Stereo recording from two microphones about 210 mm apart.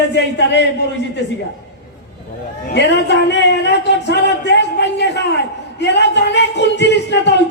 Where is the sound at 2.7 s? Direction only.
55° left (ahead or behind).